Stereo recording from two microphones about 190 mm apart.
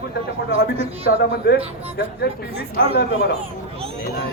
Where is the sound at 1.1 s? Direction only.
55° left (ahead or behind).